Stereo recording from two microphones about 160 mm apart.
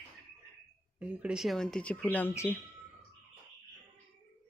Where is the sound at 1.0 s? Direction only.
5° right (ahead or behind); by 2.6 s 15° left (ahead or behind).